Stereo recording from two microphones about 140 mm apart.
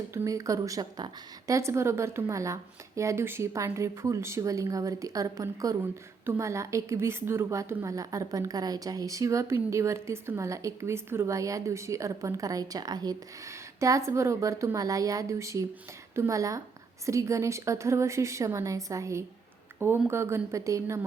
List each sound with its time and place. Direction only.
0.1 s a woman's voice: 20° right (ahead or behind)